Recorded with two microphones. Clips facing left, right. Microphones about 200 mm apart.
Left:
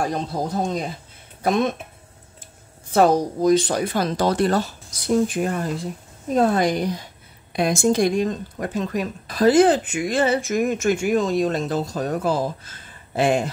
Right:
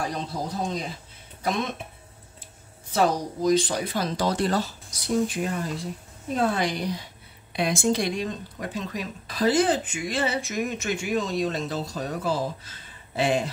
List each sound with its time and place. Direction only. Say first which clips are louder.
0.0 s speech: left 6 dB; 50° left (ahead or behind)
2.9 s speech: left 7 dB; 50° left (ahead or behind)